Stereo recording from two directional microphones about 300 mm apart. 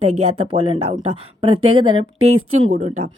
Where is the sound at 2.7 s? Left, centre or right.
Right.